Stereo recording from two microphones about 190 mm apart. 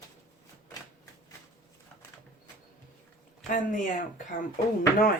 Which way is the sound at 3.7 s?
45° left (ahead or behind).